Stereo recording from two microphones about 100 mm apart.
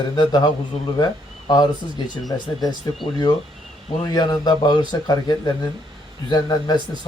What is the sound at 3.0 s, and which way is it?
A man's voice, 50° left (ahead or behind).